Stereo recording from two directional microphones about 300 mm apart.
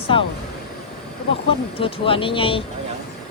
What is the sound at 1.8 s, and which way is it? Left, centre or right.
Speech, centre.